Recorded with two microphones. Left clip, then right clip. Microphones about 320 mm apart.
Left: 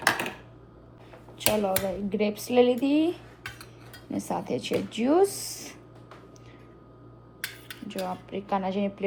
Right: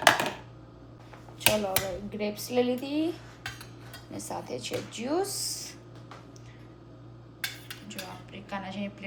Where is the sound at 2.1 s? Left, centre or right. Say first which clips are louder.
Left 6 dB; left.